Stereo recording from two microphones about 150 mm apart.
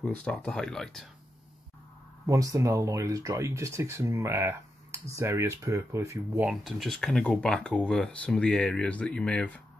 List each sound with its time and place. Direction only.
0.0 s speech: 5° left (ahead or behind)
2.2 s speech: 25° right (ahead or behind)
6.5 s speech: centre (ahead or behind)